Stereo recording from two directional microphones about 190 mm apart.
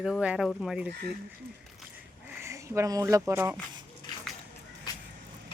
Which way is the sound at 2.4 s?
15° right (ahead or behind).